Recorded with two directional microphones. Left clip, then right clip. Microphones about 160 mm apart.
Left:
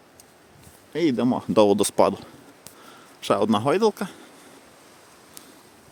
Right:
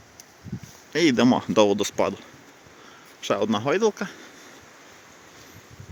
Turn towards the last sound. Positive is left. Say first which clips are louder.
# left 1 dB
turn(degrees=15)  # may be behind; listen again after turning